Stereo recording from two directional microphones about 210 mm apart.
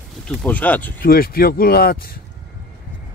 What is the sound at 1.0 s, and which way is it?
Speech, 45° left (ahead or behind).